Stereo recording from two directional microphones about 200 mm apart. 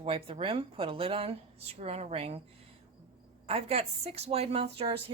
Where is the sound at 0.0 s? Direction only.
30° right (ahead or behind).